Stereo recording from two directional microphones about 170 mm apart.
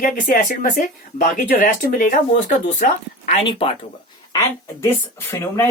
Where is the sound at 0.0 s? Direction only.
50° left (ahead or behind).